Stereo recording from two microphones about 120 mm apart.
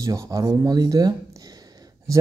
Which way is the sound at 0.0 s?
30° right (ahead or behind).